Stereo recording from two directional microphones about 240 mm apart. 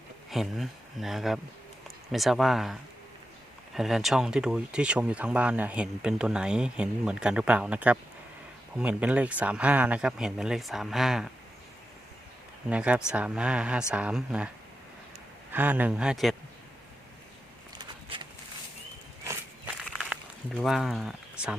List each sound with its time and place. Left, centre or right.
0.3 s speech: centre
3.8 s speech: centre
12.7 s speech: centre
15.5 s speech: centre
17.7 s a sound: centre
19.2 s walk: centre
20.1 s a sound: centre